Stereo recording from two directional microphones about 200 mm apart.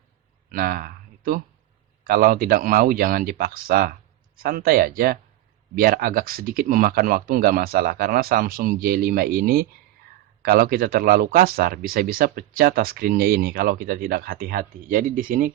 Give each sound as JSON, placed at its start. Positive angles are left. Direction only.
{"t": 0.5, "sound": "speech", "side_deg": -45}